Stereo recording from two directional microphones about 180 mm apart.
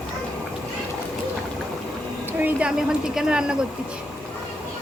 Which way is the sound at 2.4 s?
5° right (ahead or behind).